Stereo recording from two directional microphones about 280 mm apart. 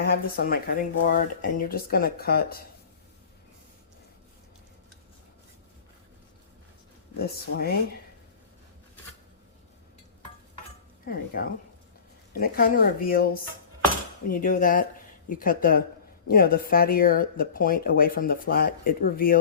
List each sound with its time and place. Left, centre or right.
0.0 s speech: left
7.2 s speech: left
11.0 s speech: left